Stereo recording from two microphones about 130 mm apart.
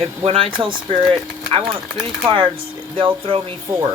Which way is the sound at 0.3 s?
45° right (ahead or behind).